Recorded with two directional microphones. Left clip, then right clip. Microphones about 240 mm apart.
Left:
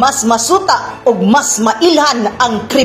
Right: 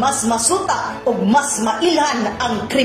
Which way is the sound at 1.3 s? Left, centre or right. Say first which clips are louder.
Left 5 dB; left.